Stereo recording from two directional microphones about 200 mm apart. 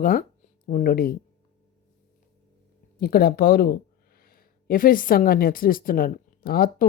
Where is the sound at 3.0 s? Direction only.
50° left (ahead or behind).